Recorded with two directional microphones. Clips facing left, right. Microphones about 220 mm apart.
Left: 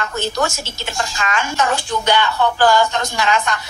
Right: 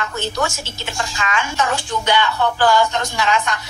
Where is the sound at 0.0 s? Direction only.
40° left (ahead or behind).